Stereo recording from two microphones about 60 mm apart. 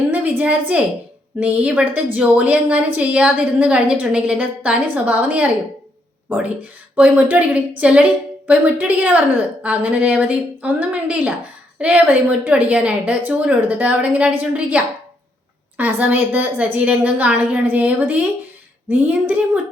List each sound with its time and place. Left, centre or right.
0.1 s a sound: right
1.4 s a woman's voice: right
6.6 s a woman's voice: right
16.0 s a woman's voice: right